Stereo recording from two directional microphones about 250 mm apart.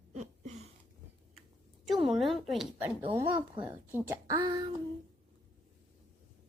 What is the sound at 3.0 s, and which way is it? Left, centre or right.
A child's voice, right.